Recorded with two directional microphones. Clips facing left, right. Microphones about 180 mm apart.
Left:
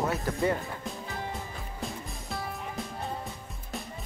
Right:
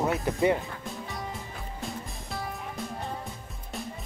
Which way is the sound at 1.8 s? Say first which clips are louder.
Even; centre (ahead or behind).